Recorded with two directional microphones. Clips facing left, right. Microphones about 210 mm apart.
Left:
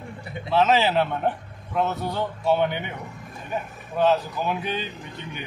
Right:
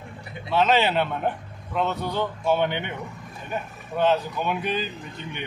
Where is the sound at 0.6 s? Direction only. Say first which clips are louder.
Left 1 dB; centre (ahead or behind).